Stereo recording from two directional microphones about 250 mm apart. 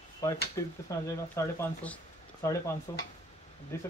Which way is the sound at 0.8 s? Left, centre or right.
Centre.